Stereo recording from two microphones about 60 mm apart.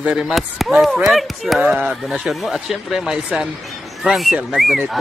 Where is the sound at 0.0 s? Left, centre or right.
Centre.